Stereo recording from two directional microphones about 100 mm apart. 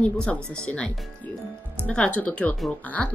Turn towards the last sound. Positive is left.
turn(degrees=15)  # may be behind; listen again after turning